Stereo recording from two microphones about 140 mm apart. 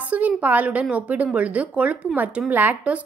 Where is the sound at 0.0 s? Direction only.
10° right (ahead or behind).